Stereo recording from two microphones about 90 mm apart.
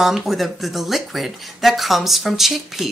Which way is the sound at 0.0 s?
Centre (ahead or behind).